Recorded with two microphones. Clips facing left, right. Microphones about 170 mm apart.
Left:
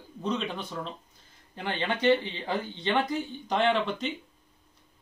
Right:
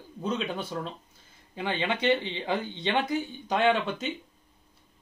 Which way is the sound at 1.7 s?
15° right (ahead or behind).